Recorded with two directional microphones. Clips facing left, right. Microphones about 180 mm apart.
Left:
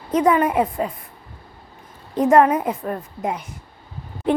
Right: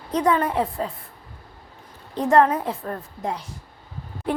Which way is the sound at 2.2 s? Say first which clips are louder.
Left 3 dB; 15° left (ahead or behind).